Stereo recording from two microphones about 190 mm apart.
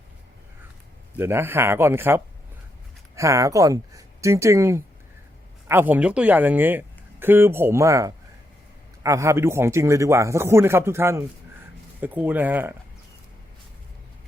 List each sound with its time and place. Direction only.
1.1 s speech: 10° right (ahead or behind)